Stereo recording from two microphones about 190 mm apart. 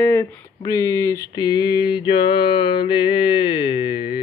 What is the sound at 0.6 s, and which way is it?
Speech, 20° left (ahead or behind).